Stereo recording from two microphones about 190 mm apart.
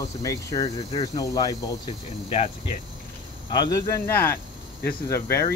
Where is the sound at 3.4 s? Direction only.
20° left (ahead or behind).